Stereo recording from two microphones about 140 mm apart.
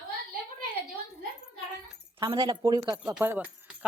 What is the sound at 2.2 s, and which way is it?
Speech, 30° right (ahead or behind).